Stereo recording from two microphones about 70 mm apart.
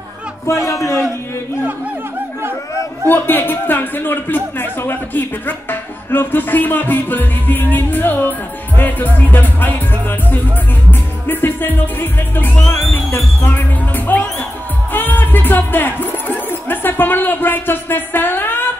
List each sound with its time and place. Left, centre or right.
0.7 s a man's voice: left
3.1 s speech: left
10.9 s music: left
13.1 s speech: left
14.9 s music: left